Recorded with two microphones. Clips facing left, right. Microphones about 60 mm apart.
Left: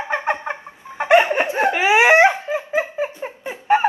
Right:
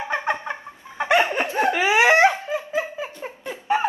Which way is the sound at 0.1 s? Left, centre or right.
Left.